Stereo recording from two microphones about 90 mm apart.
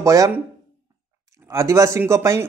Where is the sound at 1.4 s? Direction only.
30° right (ahead or behind).